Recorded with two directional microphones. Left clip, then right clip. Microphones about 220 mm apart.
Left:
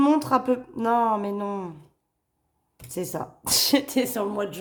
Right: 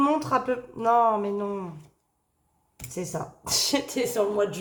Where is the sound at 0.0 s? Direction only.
45° left (ahead or behind).